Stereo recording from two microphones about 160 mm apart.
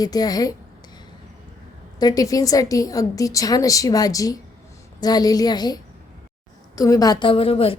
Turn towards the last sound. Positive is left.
turn(degrees=35)  # may be behind; listen again after turning